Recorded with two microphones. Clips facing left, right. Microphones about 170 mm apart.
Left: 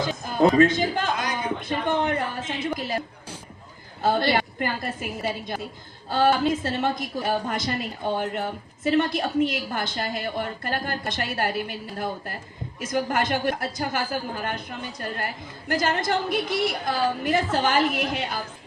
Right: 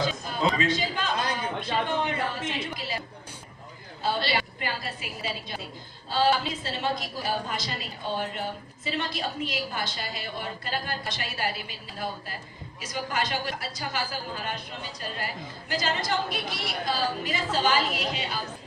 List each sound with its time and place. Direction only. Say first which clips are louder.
0.1 s a woman's voice: left 7 dB; 50° left (ahead or behind)
1.1 s a sound: left 1 dB; 30° right (ahead or behind)
1.7 s a man's voice: left 4 dB; 50° left (ahead or behind)
4.0 s a woman's voice: left 6 dB; 50° left (ahead or behind)